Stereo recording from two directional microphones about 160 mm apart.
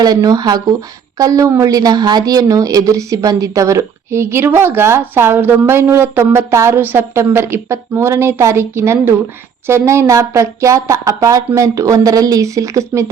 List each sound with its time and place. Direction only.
0.0 s a woman's voice: 25° right (ahead or behind)